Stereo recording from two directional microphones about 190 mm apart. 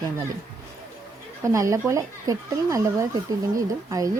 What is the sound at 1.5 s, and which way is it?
A woman's voice, 15° right (ahead or behind).